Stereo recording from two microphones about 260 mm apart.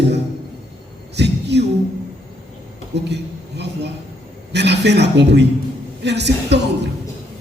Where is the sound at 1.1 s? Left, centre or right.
Right.